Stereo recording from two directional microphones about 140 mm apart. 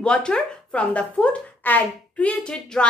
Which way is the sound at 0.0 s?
5° left (ahead or behind).